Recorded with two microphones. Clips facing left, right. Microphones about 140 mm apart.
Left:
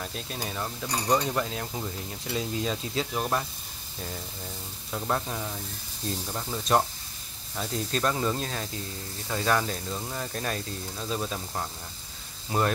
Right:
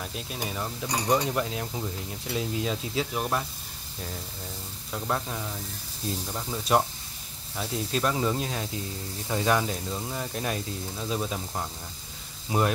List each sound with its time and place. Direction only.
0.0 s speech: 5° right (ahead or behind)
4.9 s speech: 5° left (ahead or behind)